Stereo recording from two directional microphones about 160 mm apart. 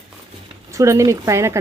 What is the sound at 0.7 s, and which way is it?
Speech, 20° right (ahead or behind).